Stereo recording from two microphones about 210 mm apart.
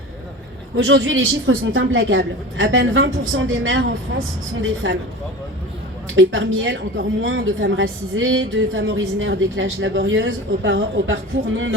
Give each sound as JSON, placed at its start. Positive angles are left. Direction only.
{"t": 0.8, "sound": "a woman's voice", "side_deg": -65}
{"t": 6.1, "sound": "a woman's voice", "side_deg": -65}